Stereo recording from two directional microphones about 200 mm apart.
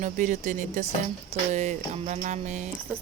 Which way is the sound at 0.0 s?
40° right (ahead or behind).